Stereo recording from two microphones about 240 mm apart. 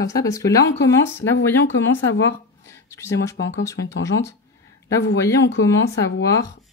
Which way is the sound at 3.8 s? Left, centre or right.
Left.